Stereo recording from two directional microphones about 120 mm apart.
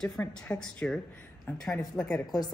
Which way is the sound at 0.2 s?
10° left (ahead or behind).